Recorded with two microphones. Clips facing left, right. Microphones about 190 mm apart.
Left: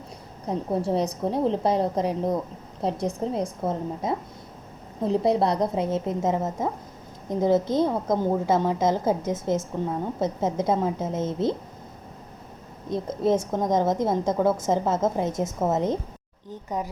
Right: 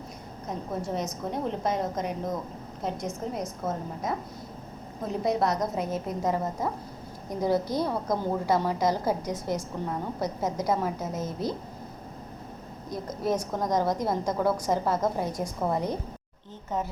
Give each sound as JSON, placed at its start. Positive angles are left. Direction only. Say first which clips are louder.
{"t": 0.4, "sound": "a woman's voice", "louder": "left 7 dB", "side_deg": 30}
{"t": 12.9, "sound": "a woman's voice", "louder": "left 6 dB", "side_deg": 25}